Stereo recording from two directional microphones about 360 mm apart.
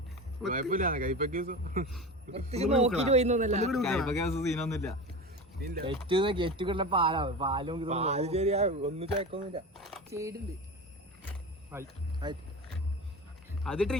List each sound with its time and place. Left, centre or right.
0.5 s speech: right
3.7 s speech: centre
5.8 s speech: centre
9.7 s a sound: centre
11.7 s speech: centre
13.7 s speech: centre